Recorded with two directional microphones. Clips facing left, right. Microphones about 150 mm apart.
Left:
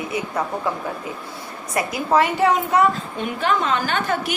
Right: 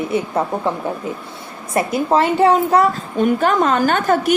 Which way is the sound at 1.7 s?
25° right (ahead or behind).